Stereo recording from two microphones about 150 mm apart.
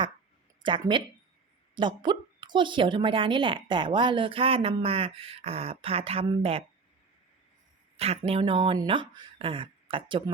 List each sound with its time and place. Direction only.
0.6 s a woman's voice: 30° right (ahead or behind)
7.9 s a woman's voice: 45° right (ahead or behind)